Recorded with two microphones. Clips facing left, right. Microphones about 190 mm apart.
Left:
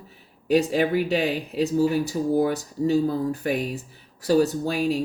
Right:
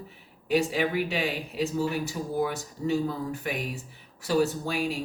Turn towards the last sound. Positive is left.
turn(degrees=40)  # may be behind; listen again after turning